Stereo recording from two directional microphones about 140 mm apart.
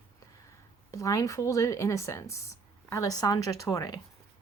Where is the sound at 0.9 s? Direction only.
25° left (ahead or behind).